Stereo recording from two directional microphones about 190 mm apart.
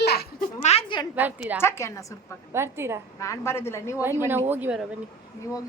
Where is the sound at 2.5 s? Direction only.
15° right (ahead or behind).